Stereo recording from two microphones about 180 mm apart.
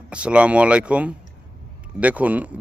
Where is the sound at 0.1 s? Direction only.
5° right (ahead or behind).